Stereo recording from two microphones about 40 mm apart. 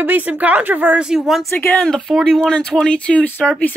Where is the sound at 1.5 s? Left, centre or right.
Left.